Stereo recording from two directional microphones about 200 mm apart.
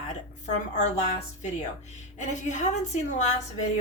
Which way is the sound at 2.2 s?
35° left (ahead or behind).